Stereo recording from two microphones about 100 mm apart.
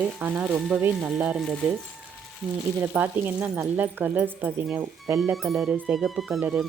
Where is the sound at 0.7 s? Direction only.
5° right (ahead or behind).